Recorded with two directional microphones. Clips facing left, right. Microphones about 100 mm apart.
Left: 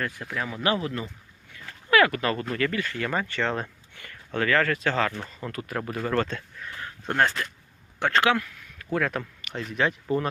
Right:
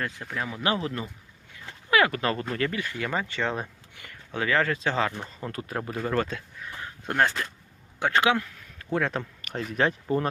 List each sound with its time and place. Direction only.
0.2 s speech: centre (ahead or behind)
0.6 s speech: 30° right (ahead or behind)
1.6 s a sound: 20° right (ahead or behind)
2.6 s speech: 20° right (ahead or behind)
5.4 s speech: 30° right (ahead or behind)
6.0 s speech: 5° right (ahead or behind)
6.7 s a sound: 15° right (ahead or behind)
7.2 s speech: 15° right (ahead or behind)
9.4 s a sound: 40° right (ahead or behind)
10.1 s speech: 35° right (ahead or behind)